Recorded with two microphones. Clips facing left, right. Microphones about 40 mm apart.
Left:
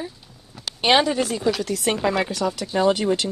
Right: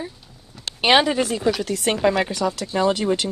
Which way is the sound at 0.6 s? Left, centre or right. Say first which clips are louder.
Even; centre.